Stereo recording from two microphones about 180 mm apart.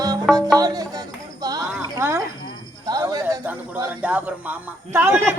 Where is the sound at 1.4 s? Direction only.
20° right (ahead or behind).